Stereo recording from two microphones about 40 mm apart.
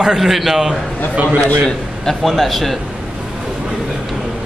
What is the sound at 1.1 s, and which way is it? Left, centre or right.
Speech, right.